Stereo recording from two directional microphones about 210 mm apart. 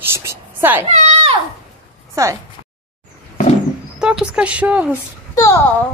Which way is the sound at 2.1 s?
15° right (ahead or behind).